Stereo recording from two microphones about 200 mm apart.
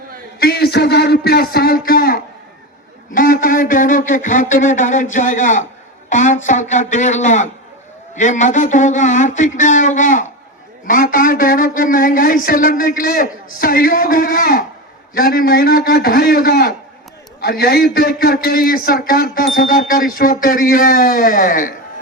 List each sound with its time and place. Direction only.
0.3 s speech: 50° left (ahead or behind)
3.2 s a sound: 45° left (ahead or behind)
10.8 s a man's voice: 45° left (ahead or behind)